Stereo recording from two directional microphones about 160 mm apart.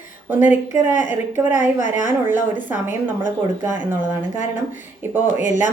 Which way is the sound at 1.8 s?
50° left (ahead or behind).